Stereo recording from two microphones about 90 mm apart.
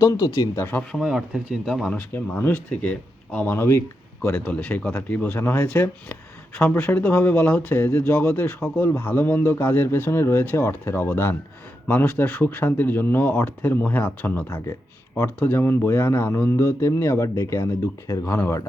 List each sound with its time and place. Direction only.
0.0 s speech: 40° left (ahead or behind)
0.5 s speech: 25° left (ahead or behind)
0.9 s speech: 10° right (ahead or behind)
1.6 s speech: centre (ahead or behind)
2.0 s speech: 20° left (ahead or behind)